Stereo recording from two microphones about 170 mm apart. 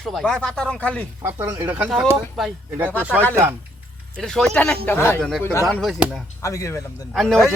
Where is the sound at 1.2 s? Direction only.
15° right (ahead or behind).